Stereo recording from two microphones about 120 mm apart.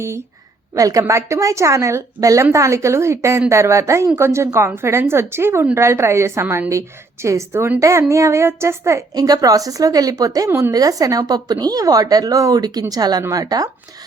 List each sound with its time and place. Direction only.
0.8 s a woman's voice: 30° right (ahead or behind)